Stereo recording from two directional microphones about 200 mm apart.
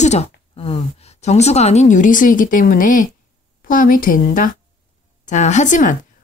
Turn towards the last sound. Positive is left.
turn(degrees=40)  # may be behind; listen again after turning